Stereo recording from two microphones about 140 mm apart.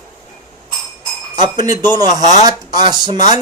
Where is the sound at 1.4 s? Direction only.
30° right (ahead or behind).